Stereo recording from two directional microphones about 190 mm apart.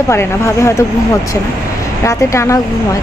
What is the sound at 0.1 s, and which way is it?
Speech, 15° left (ahead or behind).